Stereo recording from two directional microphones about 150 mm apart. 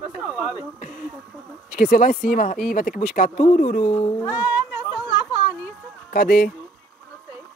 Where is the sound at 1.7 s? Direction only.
70° left (ahead or behind).